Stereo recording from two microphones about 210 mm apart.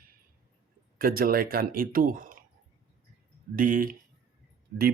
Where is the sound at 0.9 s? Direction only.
45° right (ahead or behind).